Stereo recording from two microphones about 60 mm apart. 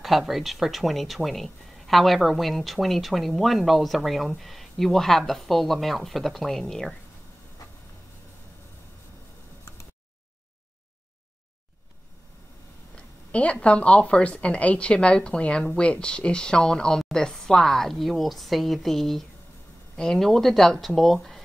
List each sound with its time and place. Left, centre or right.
0.0 s speech: centre
12.9 s a woman's voice: left; by 21.4 s centre